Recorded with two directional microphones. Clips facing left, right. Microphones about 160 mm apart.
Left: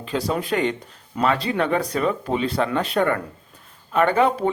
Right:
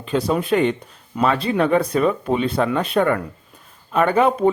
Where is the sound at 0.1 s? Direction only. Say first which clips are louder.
Right 4 dB; 20° right (ahead or behind).